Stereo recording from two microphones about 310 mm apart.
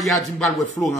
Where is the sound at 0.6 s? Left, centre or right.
Left.